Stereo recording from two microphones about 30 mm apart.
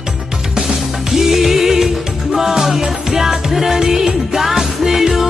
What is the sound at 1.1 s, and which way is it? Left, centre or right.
Music, centre.